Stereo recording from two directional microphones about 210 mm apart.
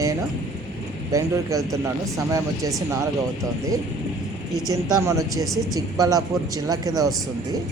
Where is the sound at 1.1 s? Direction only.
15° right (ahead or behind).